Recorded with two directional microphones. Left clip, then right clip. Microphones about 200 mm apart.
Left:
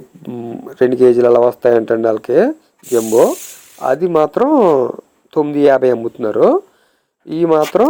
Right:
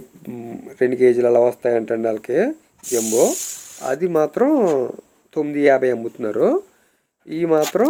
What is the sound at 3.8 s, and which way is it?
Speech, 10° left (ahead or behind).